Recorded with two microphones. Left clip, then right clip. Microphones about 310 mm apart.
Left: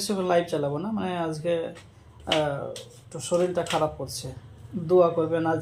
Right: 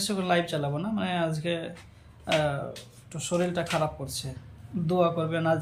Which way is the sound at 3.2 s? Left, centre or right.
Centre.